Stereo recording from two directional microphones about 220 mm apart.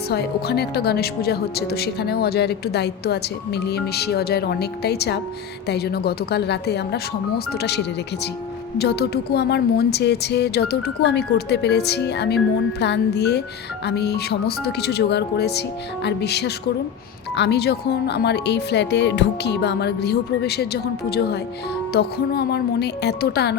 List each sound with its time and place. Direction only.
0.1 s speech: 45° left (ahead or behind)
8.8 s speech: 45° left (ahead or behind)